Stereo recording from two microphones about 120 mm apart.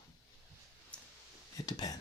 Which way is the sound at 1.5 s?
35° left (ahead or behind).